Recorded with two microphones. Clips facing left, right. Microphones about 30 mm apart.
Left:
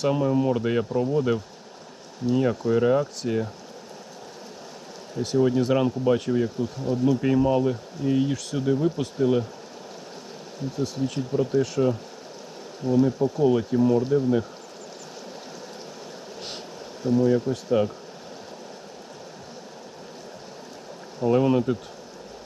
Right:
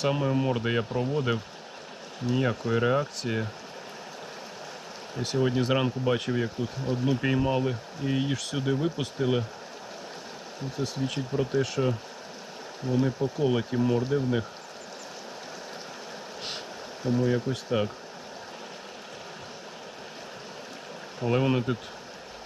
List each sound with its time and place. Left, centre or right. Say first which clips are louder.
0.0 s speech: left 4 dB; centre
5.2 s speech: left 5 dB; centre
11.0 s speech: left 4 dB; centre
17.0 s speech: left 5 dB; centre
21.2 s speech: left 5 dB; centre